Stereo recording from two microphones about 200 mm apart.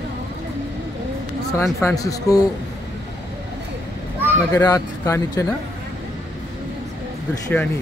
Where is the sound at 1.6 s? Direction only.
15° left (ahead or behind).